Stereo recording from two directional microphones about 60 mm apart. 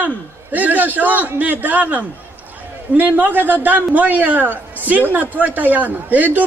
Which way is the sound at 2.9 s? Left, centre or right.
Right.